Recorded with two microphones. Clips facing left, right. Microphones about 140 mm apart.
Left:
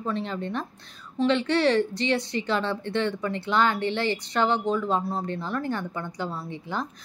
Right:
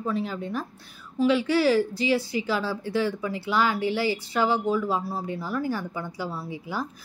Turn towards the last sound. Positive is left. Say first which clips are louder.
# even
turn(degrees=-5)  # may be behind; listen again after turning